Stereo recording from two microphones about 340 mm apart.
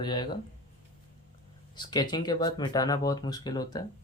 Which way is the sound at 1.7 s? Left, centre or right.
Centre.